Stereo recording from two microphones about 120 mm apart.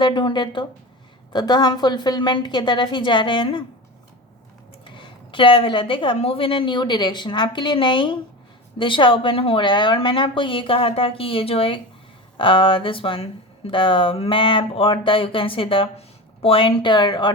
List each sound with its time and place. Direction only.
0.0 s a woman's voice: 40° left (ahead or behind)
4.9 s speech: 40° left (ahead or behind)